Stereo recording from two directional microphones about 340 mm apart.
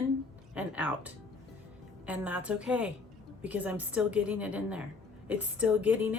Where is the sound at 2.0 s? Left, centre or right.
Centre.